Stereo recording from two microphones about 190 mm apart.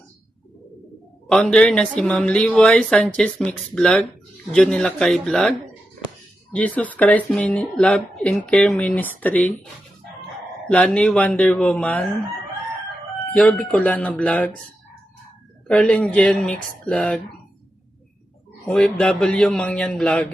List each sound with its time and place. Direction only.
1.3 s speech: 5° left (ahead or behind)
10.7 s speech: 5° left (ahead or behind)
13.3 s speech: 5° left (ahead or behind)
15.6 s speech: 5° left (ahead or behind)
18.6 s speech: 5° left (ahead or behind)